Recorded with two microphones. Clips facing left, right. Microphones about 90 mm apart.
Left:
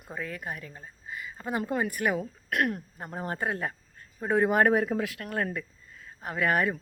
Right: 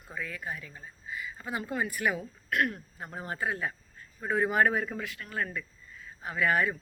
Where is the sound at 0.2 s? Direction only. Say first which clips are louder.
Left 1 dB; 40° left (ahead or behind).